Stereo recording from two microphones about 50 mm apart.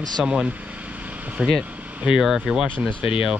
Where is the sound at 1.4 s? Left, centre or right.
Centre.